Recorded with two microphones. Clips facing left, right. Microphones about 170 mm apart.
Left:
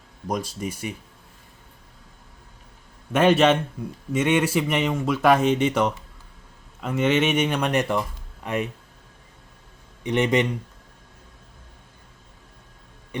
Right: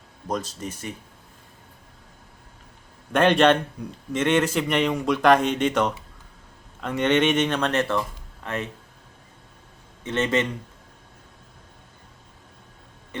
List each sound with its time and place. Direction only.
0.3 s a man's voice: 10° left (ahead or behind)
3.1 s a man's voice: 5° left (ahead or behind)
10.0 s a man's voice: 15° left (ahead or behind)